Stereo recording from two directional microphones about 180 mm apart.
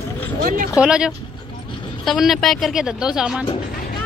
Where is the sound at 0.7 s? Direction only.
5° right (ahead or behind).